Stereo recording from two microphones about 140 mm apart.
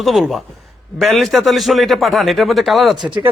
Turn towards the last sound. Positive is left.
turn(degrees=-35)  # may be behind; listen again after turning